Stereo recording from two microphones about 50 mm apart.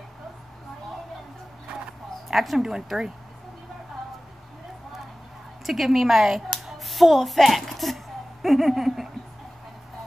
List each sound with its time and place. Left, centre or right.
2.2 s speech: centre
5.7 s speech: centre